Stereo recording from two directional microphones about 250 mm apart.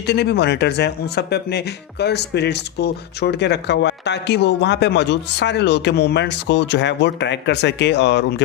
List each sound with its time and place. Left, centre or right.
0.1 s speech: left